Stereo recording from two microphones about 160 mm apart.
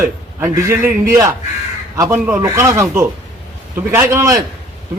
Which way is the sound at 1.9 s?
15° right (ahead or behind).